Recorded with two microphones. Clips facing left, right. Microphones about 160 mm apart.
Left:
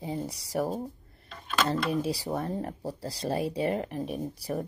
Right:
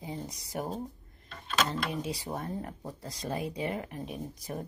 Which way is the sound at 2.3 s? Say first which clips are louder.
Left 5 dB; 35° left (ahead or behind).